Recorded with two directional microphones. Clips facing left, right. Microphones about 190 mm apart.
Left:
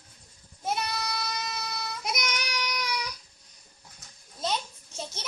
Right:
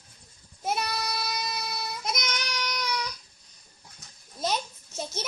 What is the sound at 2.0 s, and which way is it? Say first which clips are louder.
Child singing: left 2 dB; 10° left (ahead or behind).